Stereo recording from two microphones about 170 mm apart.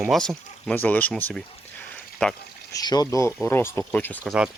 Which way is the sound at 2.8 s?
20° left (ahead or behind).